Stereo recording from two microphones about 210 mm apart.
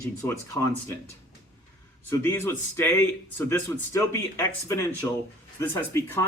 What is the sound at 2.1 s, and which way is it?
Speech, 10° left (ahead or behind).